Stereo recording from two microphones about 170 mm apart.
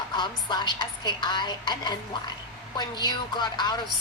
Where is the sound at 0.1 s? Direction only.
25° left (ahead or behind).